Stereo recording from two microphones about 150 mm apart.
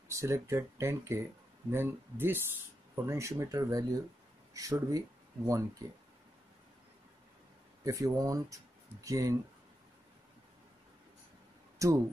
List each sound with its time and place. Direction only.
0.1 s speech: 20° right (ahead or behind)
7.8 s speech: 20° right (ahead or behind)
11.8 s speech: 20° right (ahead or behind)